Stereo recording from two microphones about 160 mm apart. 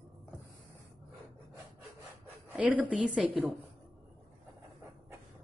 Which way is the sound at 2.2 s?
10° right (ahead or behind).